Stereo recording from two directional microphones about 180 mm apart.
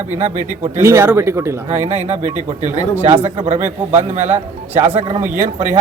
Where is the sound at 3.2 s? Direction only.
35° right (ahead or behind).